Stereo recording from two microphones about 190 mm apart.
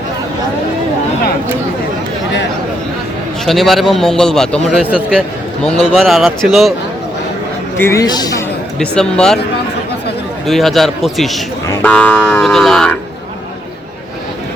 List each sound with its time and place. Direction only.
3.4 s a man's voice: centre (ahead or behind)
7.8 s speech: 15° left (ahead or behind)
8.8 s a man's voice: 5° left (ahead or behind)
10.4 s a man's voice: centre (ahead or behind)